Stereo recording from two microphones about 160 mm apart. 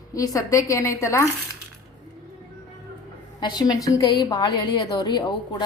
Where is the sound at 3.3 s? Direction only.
25° left (ahead or behind).